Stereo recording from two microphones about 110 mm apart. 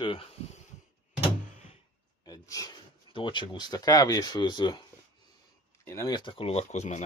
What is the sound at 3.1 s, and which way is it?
Speech, 45° left (ahead or behind).